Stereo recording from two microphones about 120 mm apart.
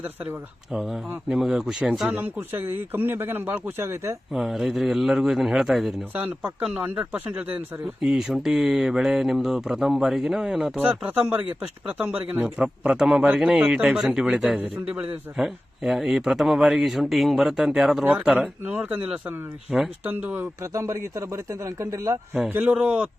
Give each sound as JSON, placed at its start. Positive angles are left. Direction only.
{"t": 0.7, "sound": "speech", "side_deg": -5}
{"t": 2.1, "sound": "speech", "side_deg": -15}
{"t": 4.3, "sound": "speech", "side_deg": -5}
{"t": 20.1, "sound": "speech", "side_deg": -15}
{"t": 20.6, "sound": "speech", "side_deg": -25}
{"t": 22.4, "sound": "speech", "side_deg": -15}